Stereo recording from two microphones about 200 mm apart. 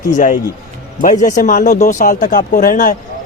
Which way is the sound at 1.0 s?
40° left (ahead or behind).